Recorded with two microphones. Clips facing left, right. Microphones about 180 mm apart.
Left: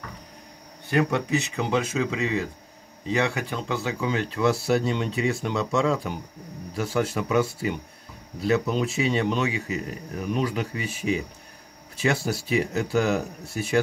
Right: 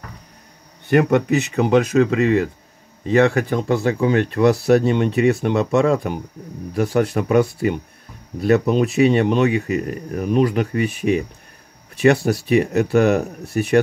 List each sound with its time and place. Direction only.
0.8 s speech: 60° right (ahead or behind)